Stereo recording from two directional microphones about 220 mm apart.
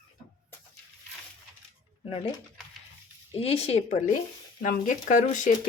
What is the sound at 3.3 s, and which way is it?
Speech, 25° left (ahead or behind).